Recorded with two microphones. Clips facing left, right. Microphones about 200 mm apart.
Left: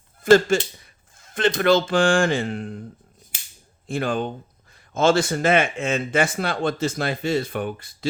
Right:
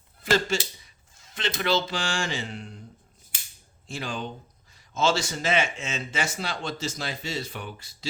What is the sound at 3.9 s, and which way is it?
Speech, 55° left (ahead or behind).